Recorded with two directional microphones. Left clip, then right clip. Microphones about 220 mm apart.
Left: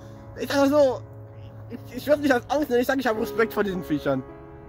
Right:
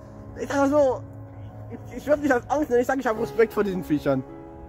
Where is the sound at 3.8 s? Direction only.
5° left (ahead or behind).